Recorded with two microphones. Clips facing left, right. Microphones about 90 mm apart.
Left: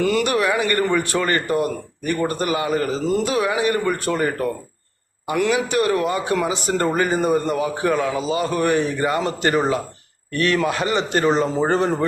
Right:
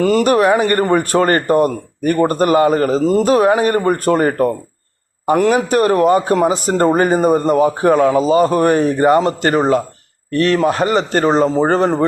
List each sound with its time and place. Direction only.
0.0 s a man's voice: 40° right (ahead or behind)